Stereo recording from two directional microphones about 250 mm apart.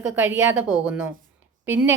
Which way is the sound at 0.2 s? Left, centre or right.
Centre.